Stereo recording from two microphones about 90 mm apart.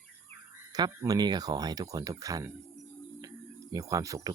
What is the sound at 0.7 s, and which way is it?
Speech, 45° right (ahead or behind).